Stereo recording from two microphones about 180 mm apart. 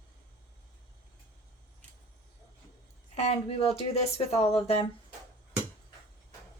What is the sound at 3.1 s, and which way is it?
Speech, 35° left (ahead or behind).